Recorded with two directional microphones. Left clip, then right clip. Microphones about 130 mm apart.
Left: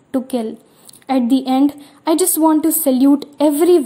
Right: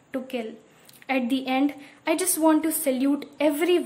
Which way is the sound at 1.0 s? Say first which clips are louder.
Left 9 dB; 25° left (ahead or behind).